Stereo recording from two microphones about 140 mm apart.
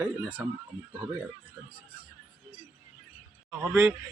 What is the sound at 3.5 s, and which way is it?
Speech, 15° right (ahead or behind).